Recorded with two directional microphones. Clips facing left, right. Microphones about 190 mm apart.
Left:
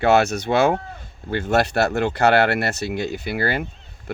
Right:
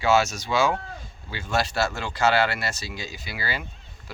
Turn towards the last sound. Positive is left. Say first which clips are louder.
# left 9 dB
turn(degrees=55)  # may be behind; listen again after turning